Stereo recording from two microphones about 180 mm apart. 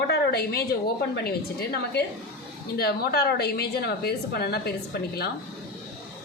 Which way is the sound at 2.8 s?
60° left (ahead or behind).